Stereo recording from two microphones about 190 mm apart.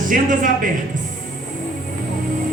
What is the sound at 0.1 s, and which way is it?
Speech, 45° right (ahead or behind).